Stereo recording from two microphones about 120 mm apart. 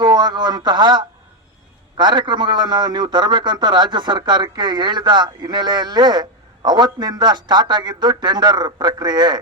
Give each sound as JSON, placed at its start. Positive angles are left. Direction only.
{"t": 0.0, "sound": "a man's voice", "side_deg": -35}